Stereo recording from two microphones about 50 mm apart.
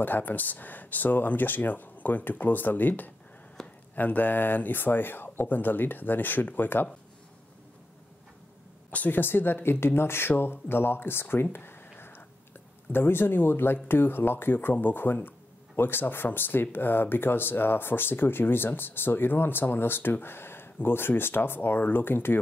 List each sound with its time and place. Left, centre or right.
0.0 s speech: left
3.6 s a sound: centre
3.9 s speech: left
8.9 s speech: left
11.5 s a sound: left
12.9 s speech: left